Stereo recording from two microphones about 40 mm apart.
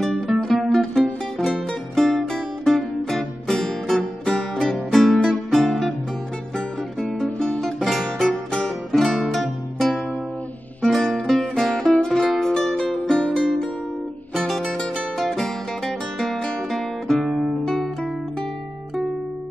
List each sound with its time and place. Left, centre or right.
0.0 s music: centre
4.2 s music: centre
7.6 s music: centre
13.2 s music: left
14.3 s music: centre